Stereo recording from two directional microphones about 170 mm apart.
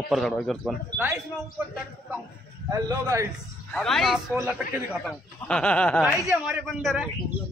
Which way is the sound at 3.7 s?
Centre (ahead or behind).